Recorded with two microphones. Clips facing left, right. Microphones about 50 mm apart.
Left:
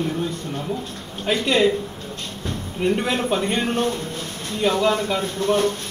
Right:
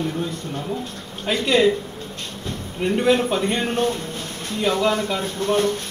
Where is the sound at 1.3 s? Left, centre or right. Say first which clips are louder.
Left 1 dB; centre.